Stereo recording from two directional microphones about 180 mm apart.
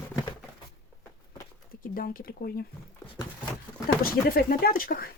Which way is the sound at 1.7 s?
55° left (ahead or behind).